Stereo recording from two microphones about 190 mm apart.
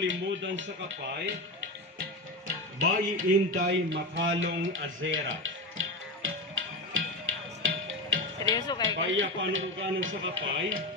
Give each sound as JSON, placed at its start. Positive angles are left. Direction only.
{"t": 0.0, "sound": "speech", "side_deg": -80}
{"t": 2.9, "sound": "speech", "side_deg": -45}
{"t": 3.6, "sound": "a sound", "side_deg": -70}
{"t": 7.6, "sound": "music", "side_deg": -90}
{"t": 8.5, "sound": "speech", "side_deg": 20}
{"t": 8.8, "sound": "a man's voice", "side_deg": -90}